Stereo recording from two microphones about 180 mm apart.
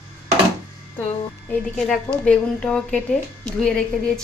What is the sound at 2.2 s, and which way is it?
A woman's voice, 5° left (ahead or behind).